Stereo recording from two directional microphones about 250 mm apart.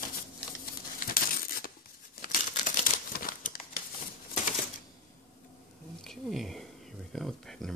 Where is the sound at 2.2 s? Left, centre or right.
Left.